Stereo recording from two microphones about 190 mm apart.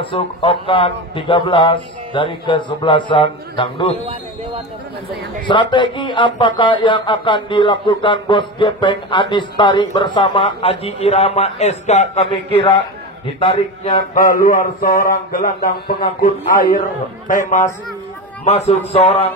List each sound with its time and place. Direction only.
0.0 s speech: 30° left (ahead or behind)
4.0 s a sound: 25° right (ahead or behind)
5.5 s speech: 25° left (ahead or behind)
14.1 s a man's voice: 45° left (ahead or behind)